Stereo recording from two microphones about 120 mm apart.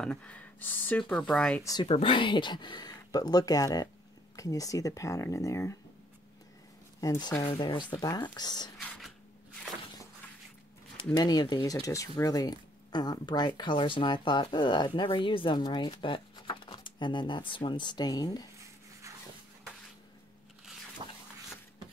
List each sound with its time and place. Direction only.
0.0 s speech: 10° left (ahead or behind)
1.6 s speech: 30° left (ahead or behind)
1.9 s speech: 50° left (ahead or behind); by 5.8 s 25° left (ahead or behind)
7.0 s speech: 30° left (ahead or behind)
8.8 s a sound: 5° left (ahead or behind)
11.1 s speech: 35° left (ahead or behind)
21.0 s a sound: 40° right (ahead or behind)